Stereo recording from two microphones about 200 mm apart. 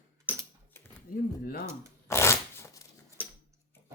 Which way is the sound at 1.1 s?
45° left (ahead or behind).